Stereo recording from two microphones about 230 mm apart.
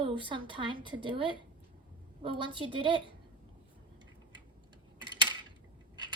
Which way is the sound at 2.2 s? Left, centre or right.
Right.